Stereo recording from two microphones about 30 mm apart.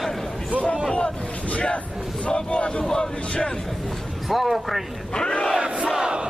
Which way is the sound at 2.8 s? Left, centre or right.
Left.